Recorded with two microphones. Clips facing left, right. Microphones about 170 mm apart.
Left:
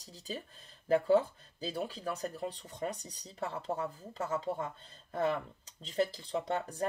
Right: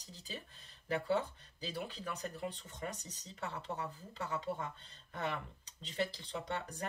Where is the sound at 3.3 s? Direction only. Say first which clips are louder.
Left 6 dB; 35° left (ahead or behind).